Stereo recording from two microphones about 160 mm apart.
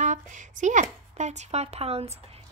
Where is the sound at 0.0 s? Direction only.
50° right (ahead or behind).